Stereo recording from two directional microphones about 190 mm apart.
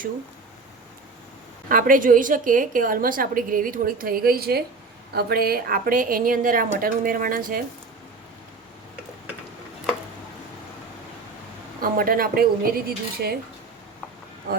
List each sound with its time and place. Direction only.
1.7 s a woman's voice: 45° right (ahead or behind)
11.8 s a woman's voice: 50° right (ahead or behind)